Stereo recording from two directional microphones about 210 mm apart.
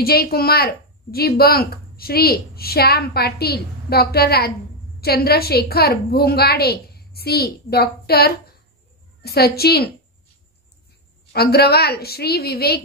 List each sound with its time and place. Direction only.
0.0 s a woman's voice: 45° left (ahead or behind)
11.3 s a woman's voice: 50° left (ahead or behind)